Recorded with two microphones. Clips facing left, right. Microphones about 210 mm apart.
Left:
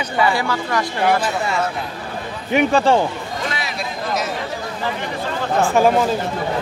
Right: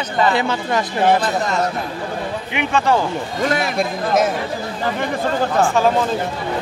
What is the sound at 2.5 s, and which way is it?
Speech, 40° left (ahead or behind).